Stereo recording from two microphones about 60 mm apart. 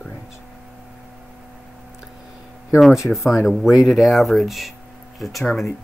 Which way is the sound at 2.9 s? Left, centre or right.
Centre.